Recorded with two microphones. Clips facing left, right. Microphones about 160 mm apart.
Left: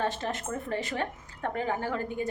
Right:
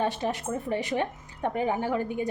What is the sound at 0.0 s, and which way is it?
A woman's voice, 15° right (ahead or behind).